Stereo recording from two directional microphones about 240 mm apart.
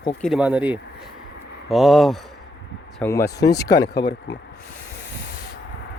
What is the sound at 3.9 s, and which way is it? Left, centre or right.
Speech, left.